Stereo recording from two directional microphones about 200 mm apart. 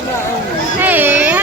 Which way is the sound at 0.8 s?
10° right (ahead or behind).